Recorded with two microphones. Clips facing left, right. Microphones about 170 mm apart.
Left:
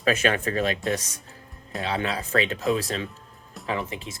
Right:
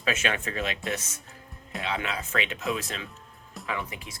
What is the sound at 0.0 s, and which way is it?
Speech, 40° left (ahead or behind).